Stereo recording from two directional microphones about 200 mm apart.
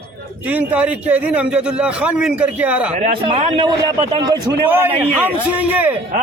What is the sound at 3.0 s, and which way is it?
A man's voice, 30° right (ahead or behind).